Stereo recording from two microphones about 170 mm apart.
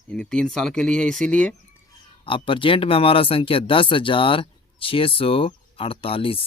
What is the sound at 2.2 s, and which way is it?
Speech, 30° left (ahead or behind).